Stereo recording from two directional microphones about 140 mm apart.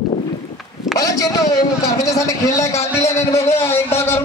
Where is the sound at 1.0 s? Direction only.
25° left (ahead or behind).